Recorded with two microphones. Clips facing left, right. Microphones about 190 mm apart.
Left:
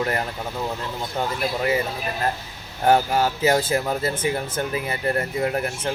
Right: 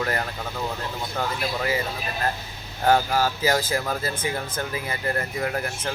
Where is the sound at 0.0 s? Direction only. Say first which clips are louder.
Left 2 dB; 20° left (ahead or behind).